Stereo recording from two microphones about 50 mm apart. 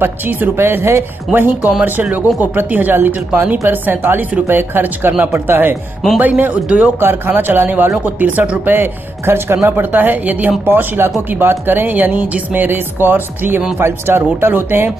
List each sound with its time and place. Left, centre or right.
0.0 s speech: right
3.3 s speech: right
3.6 s speech: right
6.1 s speech: right
7.0 s speech: right
8.6 s speech: right
9.7 s speech: right
12.6 s speech: right